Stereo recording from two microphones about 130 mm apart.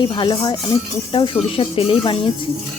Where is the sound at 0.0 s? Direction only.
35° left (ahead or behind).